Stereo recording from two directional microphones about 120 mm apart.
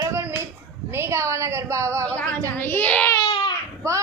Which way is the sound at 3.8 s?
25° right (ahead or behind).